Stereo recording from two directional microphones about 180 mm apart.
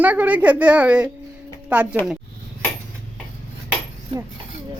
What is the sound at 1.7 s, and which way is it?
Speech, 10° right (ahead or behind).